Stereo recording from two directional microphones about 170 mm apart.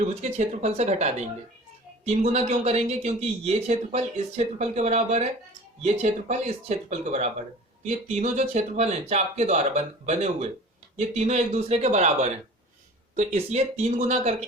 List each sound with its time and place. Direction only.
0.0 s speech: 40° right (ahead or behind)